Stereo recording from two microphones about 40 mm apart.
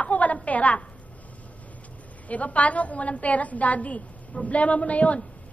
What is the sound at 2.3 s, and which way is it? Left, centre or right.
A woman's voice, left.